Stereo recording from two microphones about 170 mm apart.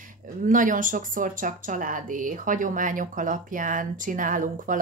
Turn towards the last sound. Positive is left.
turn(degrees=-50)  # may be behind; listen again after turning